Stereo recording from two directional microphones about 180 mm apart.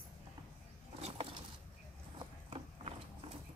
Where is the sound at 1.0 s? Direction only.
30° right (ahead or behind).